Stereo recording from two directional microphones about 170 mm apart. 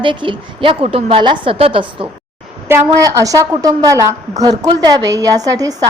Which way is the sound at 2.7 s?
20° right (ahead or behind).